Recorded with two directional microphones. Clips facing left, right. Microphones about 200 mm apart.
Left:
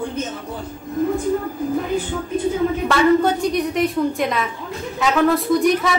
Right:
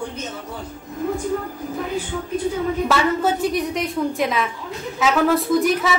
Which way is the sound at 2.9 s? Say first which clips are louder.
Left 6 dB; 5° right (ahead or behind).